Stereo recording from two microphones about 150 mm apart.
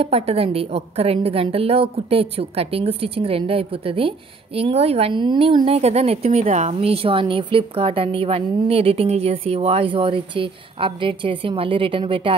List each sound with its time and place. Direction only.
0.0 s a woman's voice: 40° right (ahead or behind)